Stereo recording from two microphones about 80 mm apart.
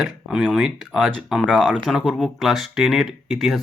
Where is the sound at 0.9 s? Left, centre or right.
Centre.